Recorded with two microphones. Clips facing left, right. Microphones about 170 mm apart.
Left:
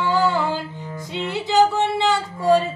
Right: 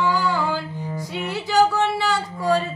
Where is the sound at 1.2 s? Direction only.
20° left (ahead or behind).